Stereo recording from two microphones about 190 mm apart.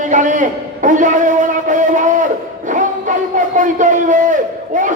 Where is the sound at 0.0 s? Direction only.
40° right (ahead or behind).